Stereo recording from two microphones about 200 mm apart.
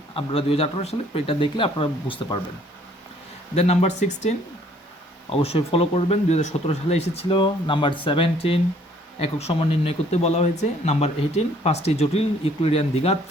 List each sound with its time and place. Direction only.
0.2 s speech: 30° left (ahead or behind)
3.5 s speech: 30° left (ahead or behind)